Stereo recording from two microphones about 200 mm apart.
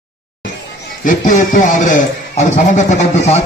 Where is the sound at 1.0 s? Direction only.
40° left (ahead or behind).